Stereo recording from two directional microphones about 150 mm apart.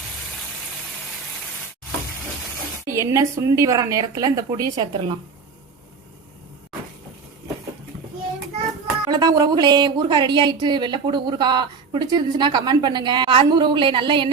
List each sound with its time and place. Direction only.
2.8 s speech: 20° right (ahead or behind)
9.0 s speech: 25° right (ahead or behind)